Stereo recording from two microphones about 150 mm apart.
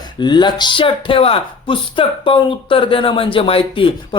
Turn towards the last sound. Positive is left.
turn(degrees=35)  # may be behind; listen again after turning